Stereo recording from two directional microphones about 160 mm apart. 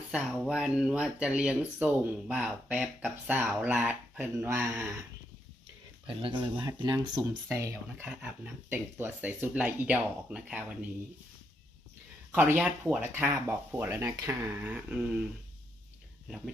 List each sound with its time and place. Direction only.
0.1 s speech: 5° right (ahead or behind)
6.0 s speech: 30° right (ahead or behind)
8.0 s speech: 10° right (ahead or behind)
12.3 s speech: 10° right (ahead or behind)
16.3 s speech: 5° right (ahead or behind)